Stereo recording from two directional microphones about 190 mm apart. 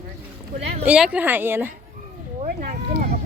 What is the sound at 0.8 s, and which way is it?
Speech, 5° right (ahead or behind).